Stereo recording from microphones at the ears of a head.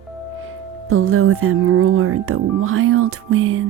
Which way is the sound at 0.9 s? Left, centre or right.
Right.